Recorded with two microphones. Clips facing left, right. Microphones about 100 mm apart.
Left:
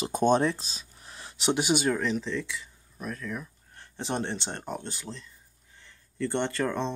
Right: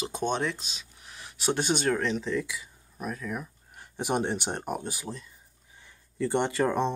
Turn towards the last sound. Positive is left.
turn(degrees=-15)  # may be behind; listen again after turning